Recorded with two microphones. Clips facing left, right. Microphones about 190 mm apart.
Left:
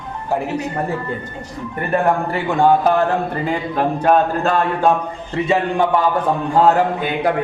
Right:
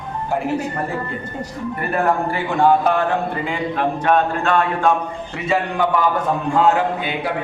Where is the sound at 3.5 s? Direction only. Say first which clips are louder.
Left 3 dB; 40° left (ahead or behind).